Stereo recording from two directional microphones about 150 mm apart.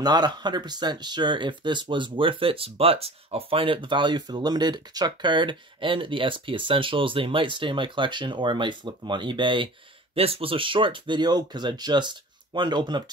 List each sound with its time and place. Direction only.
0.0 s speech: 25° right (ahead or behind)